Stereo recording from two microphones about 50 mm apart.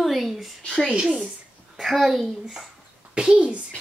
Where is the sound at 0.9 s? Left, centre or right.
Right.